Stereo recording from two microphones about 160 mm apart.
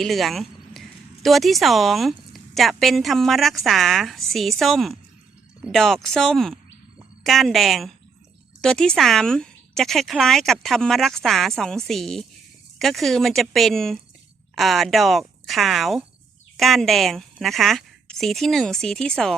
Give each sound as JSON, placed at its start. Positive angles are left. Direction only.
{"t": 0.0, "sound": "speech", "side_deg": 0}